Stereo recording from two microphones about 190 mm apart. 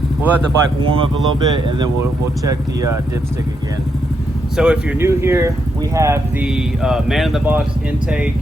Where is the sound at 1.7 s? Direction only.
20° right (ahead or behind).